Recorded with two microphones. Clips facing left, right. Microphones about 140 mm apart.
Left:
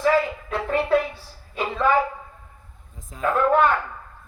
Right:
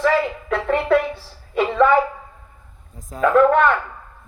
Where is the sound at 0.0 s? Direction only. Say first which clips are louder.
Right 1 dB; 90° right.